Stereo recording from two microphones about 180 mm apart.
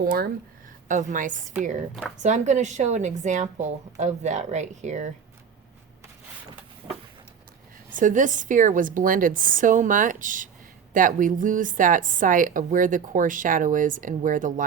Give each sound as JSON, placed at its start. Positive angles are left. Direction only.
{"t": 0.0, "sound": "a woman's voice", "side_deg": -55}
{"t": 6.8, "sound": "a sound", "side_deg": -20}
{"t": 7.9, "sound": "a woman's voice", "side_deg": -45}